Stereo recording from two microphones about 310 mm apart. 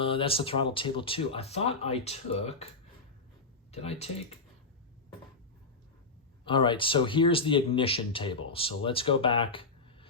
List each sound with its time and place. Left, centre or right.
0.0 s speech: centre
3.7 s speech: centre
6.4 s speech: centre